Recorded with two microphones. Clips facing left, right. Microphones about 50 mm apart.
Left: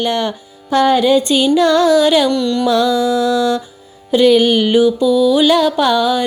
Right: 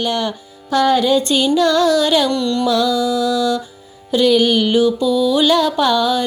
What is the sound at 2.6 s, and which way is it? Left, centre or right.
Music, left.